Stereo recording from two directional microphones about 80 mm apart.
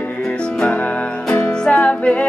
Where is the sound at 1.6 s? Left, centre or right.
Centre.